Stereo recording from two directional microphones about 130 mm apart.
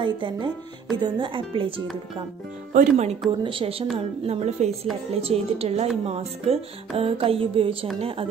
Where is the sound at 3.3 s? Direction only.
40° right (ahead or behind).